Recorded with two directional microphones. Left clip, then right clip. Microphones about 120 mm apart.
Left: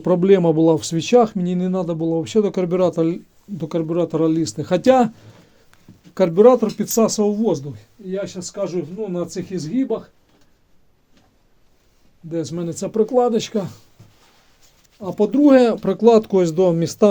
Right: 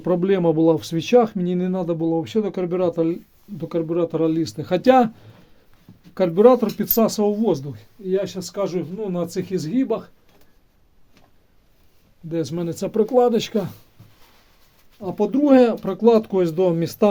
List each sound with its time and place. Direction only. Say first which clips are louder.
0.0 s speech: left 4 dB; 25° left (ahead or behind)
6.3 s speech: left 2 dB; centre (ahead or behind)
8.1 s speech: right 3 dB; 20° right (ahead or behind)
12.3 s speech: even; 15° right (ahead or behind)
15.0 s speech: left 3 dB; 20° left (ahead or behind)
15.4 s speech: left 1 dB; 35° left (ahead or behind); by 17.1 s 15° left (ahead or behind)